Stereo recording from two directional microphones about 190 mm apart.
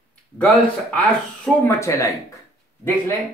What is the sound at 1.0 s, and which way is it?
Speech, 10° left (ahead or behind).